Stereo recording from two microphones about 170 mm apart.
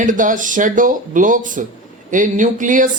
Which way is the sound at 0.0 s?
50° right (ahead or behind).